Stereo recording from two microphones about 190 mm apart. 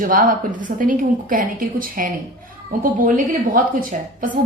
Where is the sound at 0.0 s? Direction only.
45° right (ahead or behind).